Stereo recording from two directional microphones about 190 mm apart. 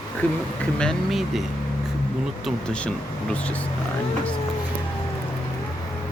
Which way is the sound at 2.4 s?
5° left (ahead or behind).